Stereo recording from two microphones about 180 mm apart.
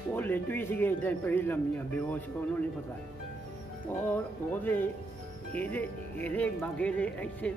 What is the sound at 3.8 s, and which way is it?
A man's voice, 10° left (ahead or behind).